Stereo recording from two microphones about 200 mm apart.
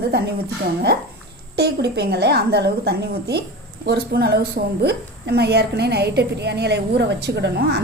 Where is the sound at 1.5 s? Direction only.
55° right (ahead or behind).